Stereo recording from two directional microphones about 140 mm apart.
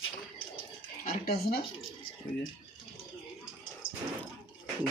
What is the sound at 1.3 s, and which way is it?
Speech, 90° left.